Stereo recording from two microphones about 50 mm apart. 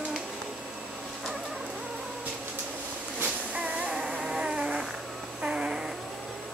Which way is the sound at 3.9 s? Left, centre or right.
Centre.